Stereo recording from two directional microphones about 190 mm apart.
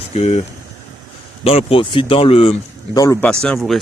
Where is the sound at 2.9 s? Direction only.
15° left (ahead or behind).